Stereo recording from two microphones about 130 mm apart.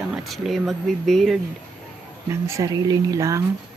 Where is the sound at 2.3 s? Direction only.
25° right (ahead or behind).